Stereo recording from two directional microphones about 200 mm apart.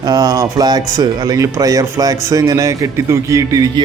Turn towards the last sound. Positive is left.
turn(degrees=-15)  # may be behind; listen again after turning